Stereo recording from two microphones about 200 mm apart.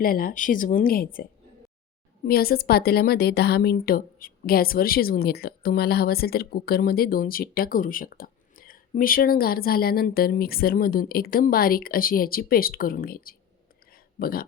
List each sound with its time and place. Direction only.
0.0 s a woman's voice: 45° left (ahead or behind)
2.2 s a woman's voice: 50° left (ahead or behind)
13.9 s a sound: 45° left (ahead or behind)